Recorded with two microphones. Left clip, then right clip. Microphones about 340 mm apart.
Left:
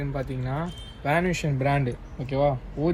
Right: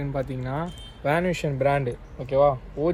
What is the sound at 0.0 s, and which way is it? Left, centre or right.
Speech, right.